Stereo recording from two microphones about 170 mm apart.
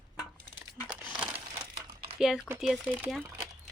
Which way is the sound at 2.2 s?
5° right (ahead or behind).